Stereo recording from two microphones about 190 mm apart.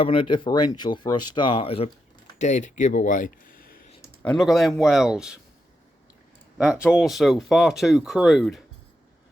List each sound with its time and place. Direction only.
0.0 s speech: 25° left (ahead or behind)
2.4 s speech: 40° left (ahead or behind)
4.0 s speech: 5° left (ahead or behind)
6.6 s speech: 5° right (ahead or behind)